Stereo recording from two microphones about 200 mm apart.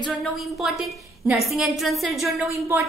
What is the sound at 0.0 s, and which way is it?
A woman's voice, centre (ahead or behind).